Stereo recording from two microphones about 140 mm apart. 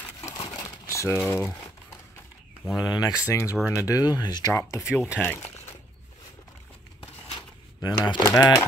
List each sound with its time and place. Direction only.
0.2 s crumpling: 25° left (ahead or behind)
2.8 s speech: 30° left (ahead or behind)
4.9 s speech: 5° right (ahead or behind)
5.2 s speech: 15° left (ahead or behind)
7.8 s speech: 30° left (ahead or behind)